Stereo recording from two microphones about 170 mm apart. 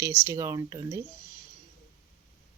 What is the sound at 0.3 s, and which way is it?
Speech, 20° right (ahead or behind).